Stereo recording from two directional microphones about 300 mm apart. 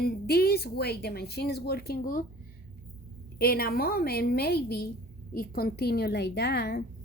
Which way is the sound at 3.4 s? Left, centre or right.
Left.